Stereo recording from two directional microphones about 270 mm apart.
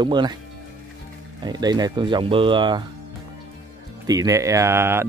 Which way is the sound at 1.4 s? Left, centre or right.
Centre.